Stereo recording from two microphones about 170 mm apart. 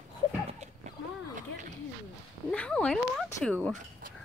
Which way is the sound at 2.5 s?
5° left (ahead or behind).